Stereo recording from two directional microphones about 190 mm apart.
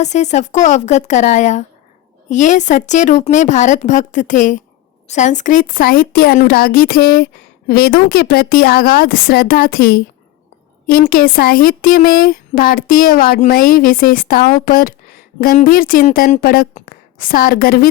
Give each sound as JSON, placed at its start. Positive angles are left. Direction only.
{"t": 0.0, "sound": "a woman's voice", "side_deg": 35}